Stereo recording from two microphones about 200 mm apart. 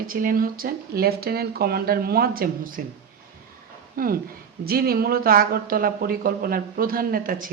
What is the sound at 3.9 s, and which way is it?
Speech, 45° right (ahead or behind).